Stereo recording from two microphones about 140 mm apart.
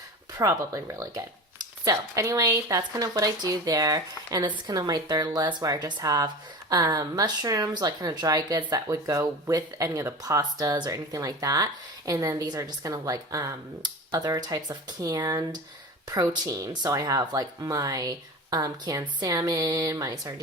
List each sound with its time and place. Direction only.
0.3 s speech: 20° right (ahead or behind)